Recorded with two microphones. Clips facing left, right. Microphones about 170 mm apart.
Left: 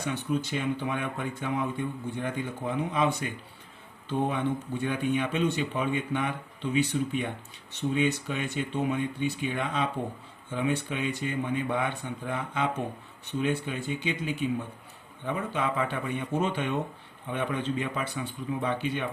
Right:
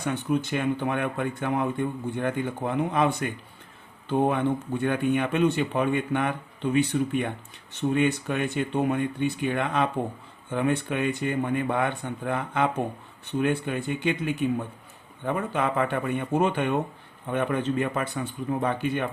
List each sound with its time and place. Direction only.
0.0 s speech: 55° right (ahead or behind)